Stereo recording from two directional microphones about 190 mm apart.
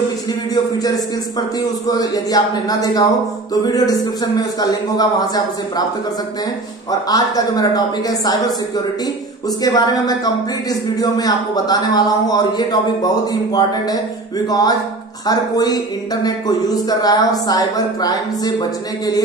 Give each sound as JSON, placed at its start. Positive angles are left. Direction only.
{"t": 1.9, "sound": "speech", "side_deg": 20}
{"t": 6.9, "sound": "speech", "side_deg": 20}
{"t": 9.6, "sound": "speech", "side_deg": 20}